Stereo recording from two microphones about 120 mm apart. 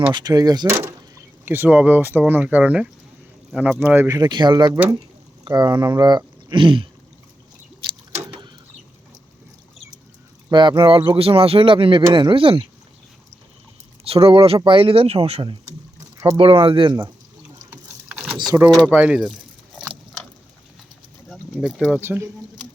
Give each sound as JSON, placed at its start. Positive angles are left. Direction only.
{"t": 0.1, "sound": "speech", "side_deg": -35}
{"t": 4.1, "sound": "speech", "side_deg": -35}
{"t": 4.7, "sound": "speech", "side_deg": -25}
{"t": 5.5, "sound": "speech", "side_deg": -35}
{"t": 10.5, "sound": "speech", "side_deg": -40}
{"t": 14.0, "sound": "speech", "side_deg": -55}
{"t": 16.1, "sound": "speech", "side_deg": -25}
{"t": 16.4, "sound": "speech", "side_deg": -50}
{"t": 17.7, "sound": "water", "side_deg": -10}
{"t": 18.9, "sound": "speech", "side_deg": -10}
{"t": 21.2, "sound": "a sound", "side_deg": 0}
{"t": 22.0, "sound": "speech", "side_deg": -20}